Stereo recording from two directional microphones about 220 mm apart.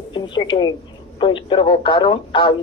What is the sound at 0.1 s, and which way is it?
Speech, 20° left (ahead or behind).